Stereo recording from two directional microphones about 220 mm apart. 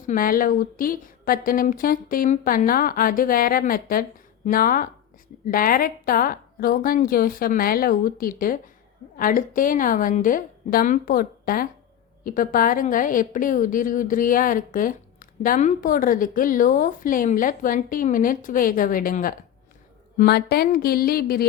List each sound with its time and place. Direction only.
0.1 s a woman's voice: 40° left (ahead or behind)